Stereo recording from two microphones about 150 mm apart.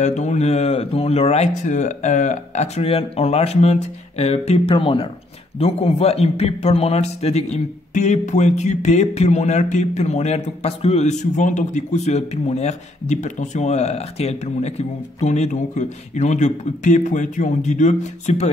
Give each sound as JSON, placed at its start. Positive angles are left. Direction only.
{"t": 0.0, "sound": "a man's voice", "side_deg": 50}